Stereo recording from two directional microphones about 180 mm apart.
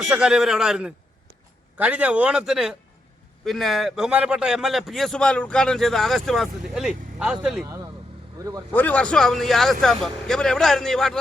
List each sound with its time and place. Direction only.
0.0 s a man's voice: 5° right (ahead or behind)
8.4 s speech: 20° right (ahead or behind)
8.7 s a man's voice: 10° left (ahead or behind)